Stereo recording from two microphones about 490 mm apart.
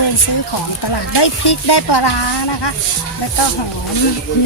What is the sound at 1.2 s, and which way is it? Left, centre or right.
Speech, left.